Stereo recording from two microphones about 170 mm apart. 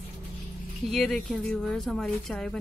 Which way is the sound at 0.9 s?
Centre (ahead or behind).